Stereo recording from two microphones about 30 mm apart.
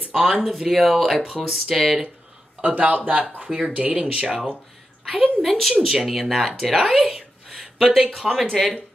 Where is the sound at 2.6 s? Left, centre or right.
Right.